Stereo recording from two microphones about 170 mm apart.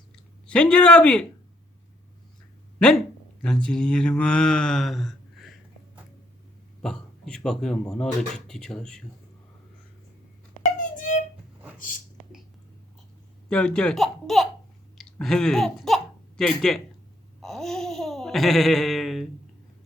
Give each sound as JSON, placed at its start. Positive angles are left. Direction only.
{"t": 0.4, "sound": "speech", "side_deg": 5}
{"t": 2.7, "sound": "speech", "side_deg": 5}
{"t": 6.8, "sound": "speech", "side_deg": 5}
{"t": 10.8, "sound": "a sound", "side_deg": 50}
{"t": 13.5, "sound": "speech", "side_deg": 5}
{"t": 17.4, "sound": "babbling", "side_deg": 0}